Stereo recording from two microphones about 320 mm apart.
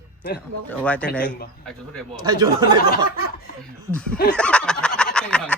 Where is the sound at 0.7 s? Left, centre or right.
Centre.